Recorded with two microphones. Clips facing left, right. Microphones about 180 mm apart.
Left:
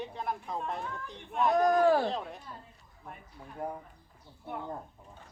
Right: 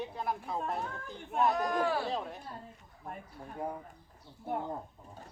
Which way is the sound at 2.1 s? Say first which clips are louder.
Even; centre (ahead or behind).